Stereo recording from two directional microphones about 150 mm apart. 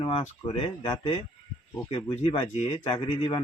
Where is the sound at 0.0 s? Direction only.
35° left (ahead or behind).